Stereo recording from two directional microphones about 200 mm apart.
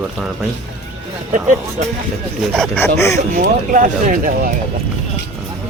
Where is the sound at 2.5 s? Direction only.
5° left (ahead or behind).